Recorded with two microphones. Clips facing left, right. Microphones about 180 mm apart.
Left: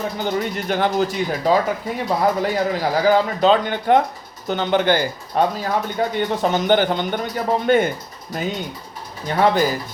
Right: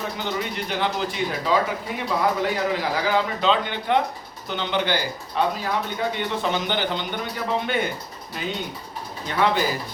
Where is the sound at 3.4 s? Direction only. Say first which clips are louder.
Left 6 dB; 45° left (ahead or behind).